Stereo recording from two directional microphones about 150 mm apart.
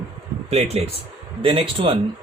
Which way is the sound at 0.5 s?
45° right (ahead or behind).